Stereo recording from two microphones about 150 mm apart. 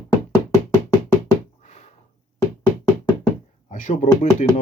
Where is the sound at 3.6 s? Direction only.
60° left (ahead or behind).